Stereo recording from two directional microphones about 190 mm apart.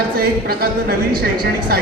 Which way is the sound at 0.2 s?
50° right (ahead or behind).